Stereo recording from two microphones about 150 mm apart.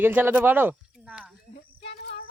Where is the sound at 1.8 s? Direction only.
40° left (ahead or behind).